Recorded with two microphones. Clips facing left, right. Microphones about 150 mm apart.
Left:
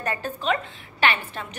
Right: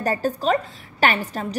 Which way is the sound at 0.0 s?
35° right (ahead or behind).